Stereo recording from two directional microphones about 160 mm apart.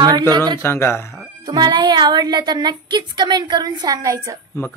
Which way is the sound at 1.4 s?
25° right (ahead or behind).